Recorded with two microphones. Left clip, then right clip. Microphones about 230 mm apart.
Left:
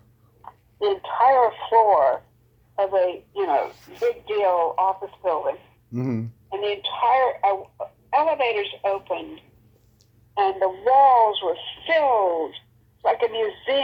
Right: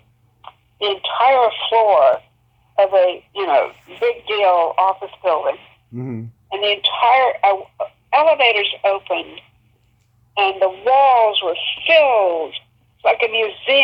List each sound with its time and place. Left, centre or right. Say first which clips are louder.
0.4 s speech: right 3 dB; right
5.9 s speech: left 2 dB; centre
6.5 s speech: right 8 dB; right